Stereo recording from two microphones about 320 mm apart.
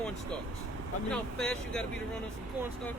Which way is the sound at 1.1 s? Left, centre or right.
Centre.